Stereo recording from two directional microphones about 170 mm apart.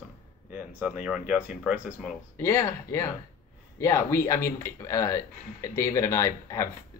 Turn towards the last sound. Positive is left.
turn(degrees=20)  # may be behind; listen again after turning